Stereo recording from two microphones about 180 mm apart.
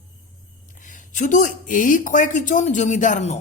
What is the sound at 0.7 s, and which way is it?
Speech, 45° left (ahead or behind).